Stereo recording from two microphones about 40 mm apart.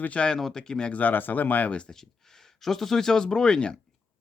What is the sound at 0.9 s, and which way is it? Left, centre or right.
Speech, left.